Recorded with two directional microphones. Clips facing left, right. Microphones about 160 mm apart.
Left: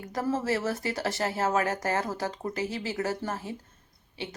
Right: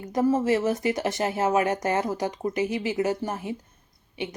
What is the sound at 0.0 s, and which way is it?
Speech, 20° right (ahead or behind).